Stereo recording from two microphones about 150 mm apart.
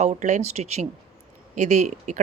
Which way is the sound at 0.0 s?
50° right (ahead or behind).